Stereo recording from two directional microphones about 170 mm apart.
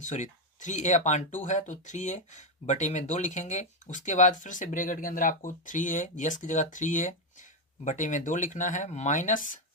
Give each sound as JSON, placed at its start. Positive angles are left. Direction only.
{"t": 0.0, "sound": "speech", "side_deg": 45}